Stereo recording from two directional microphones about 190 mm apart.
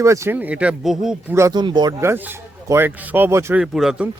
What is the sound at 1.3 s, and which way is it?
Speech, 20° right (ahead or behind).